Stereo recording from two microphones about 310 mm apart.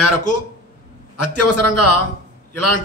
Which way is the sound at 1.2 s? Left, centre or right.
Left.